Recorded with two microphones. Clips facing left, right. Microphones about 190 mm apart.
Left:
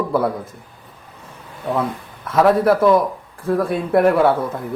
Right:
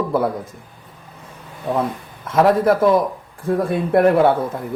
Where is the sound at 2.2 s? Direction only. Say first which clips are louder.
Even; 25° right (ahead or behind).